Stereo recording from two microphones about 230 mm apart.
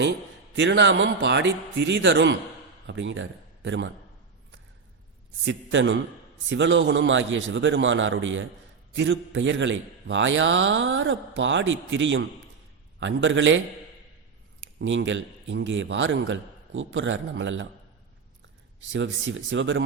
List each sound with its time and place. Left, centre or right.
0.5 s a man's voice: right
5.5 s a man's voice: right
14.8 s a man's voice: right
18.9 s a man's voice: right